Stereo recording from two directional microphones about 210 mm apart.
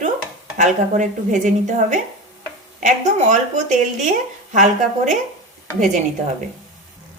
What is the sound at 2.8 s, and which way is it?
Speech, 35° right (ahead or behind).